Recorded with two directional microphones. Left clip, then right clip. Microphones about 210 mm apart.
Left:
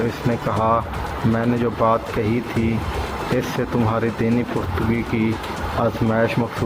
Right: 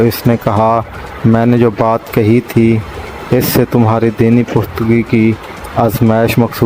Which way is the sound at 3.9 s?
50° right (ahead or behind).